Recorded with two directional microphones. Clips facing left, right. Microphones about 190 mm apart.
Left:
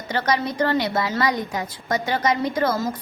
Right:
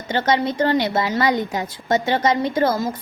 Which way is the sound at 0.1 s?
25° right (ahead or behind).